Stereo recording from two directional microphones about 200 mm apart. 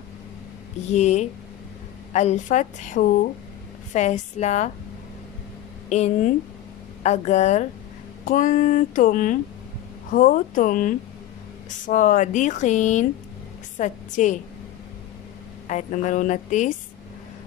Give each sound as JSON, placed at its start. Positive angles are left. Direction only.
{"t": 0.9, "sound": "speech", "side_deg": 35}
{"t": 5.9, "sound": "a woman's voice", "side_deg": 35}
{"t": 15.6, "sound": "speech", "side_deg": 40}